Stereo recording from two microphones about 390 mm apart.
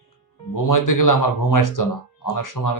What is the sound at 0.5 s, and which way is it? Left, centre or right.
Speech, left.